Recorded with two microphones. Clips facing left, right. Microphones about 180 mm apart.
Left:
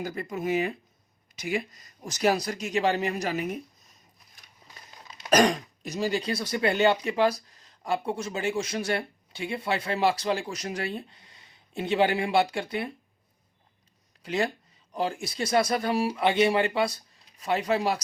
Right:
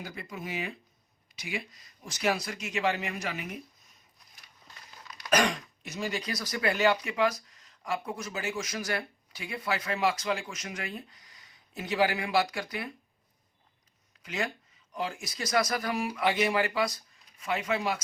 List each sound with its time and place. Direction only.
0.0 s speech: 45° left (ahead or behind)
5.0 s throat clearing: 25° left (ahead or behind)
5.3 s speech: 35° left (ahead or behind)
14.2 s speech: 30° left (ahead or behind)